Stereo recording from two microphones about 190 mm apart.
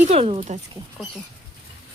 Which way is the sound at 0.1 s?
30° right (ahead or behind).